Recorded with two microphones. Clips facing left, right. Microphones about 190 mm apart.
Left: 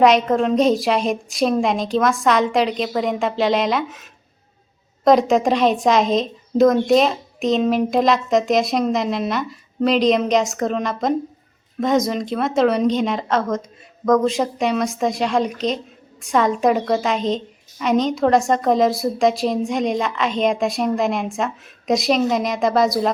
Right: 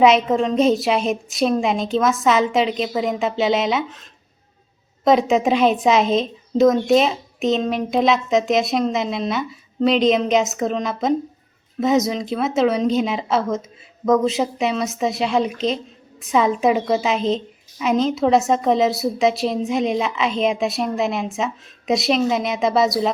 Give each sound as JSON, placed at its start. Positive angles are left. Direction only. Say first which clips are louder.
{"t": 0.0, "sound": "a woman's voice", "louder": "even", "side_deg": 0}